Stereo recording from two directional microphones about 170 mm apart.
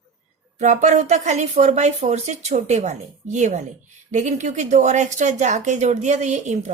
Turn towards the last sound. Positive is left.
turn(degrees=-45)  # may be behind; listen again after turning